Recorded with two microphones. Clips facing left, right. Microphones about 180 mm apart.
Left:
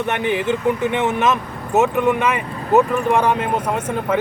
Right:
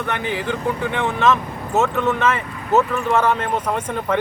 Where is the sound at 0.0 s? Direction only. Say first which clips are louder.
Left 4 dB; 20° left (ahead or behind).